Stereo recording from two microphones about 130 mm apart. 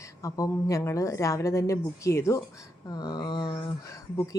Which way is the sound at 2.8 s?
30° left (ahead or behind).